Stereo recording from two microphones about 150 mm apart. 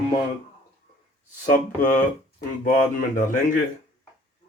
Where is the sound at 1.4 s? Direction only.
60° left (ahead or behind).